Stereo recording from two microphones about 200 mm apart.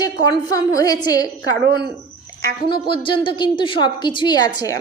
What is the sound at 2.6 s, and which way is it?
A woman's voice, 25° left (ahead or behind).